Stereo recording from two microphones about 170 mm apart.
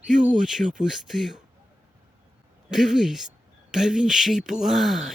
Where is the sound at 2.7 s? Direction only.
5° right (ahead or behind).